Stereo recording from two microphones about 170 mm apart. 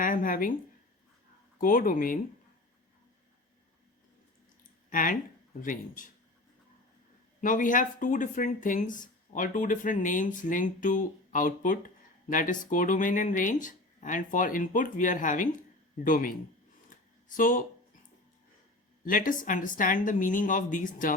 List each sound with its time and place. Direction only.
0.0 s speech: 55° left (ahead or behind)
1.5 s speech: 55° left (ahead or behind)
4.9 s speech: 55° left (ahead or behind)
7.4 s speech: 50° left (ahead or behind)
16.9 s a sound: 50° left (ahead or behind)
19.0 s speech: 55° left (ahead or behind)